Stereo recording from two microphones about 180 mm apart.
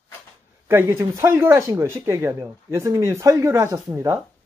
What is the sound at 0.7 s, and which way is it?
Speech, 15° right (ahead or behind).